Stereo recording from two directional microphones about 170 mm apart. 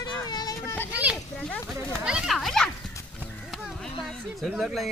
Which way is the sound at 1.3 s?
5° left (ahead or behind).